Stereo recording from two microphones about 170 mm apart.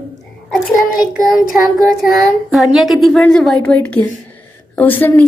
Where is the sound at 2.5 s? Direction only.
Centre (ahead or behind).